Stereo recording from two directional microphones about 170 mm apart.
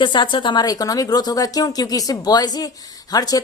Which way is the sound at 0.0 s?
25° left (ahead or behind).